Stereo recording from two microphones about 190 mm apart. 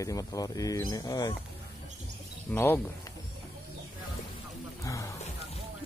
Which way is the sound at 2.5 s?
10° left (ahead or behind).